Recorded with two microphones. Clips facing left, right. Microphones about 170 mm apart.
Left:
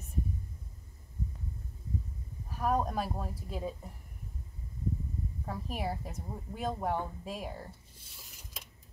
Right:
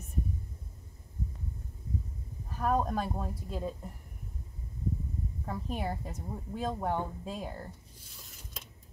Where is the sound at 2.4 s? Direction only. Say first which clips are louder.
Right 1 dB; 5° left (ahead or behind).